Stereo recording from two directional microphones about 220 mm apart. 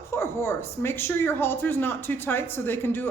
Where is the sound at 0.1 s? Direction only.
15° left (ahead or behind).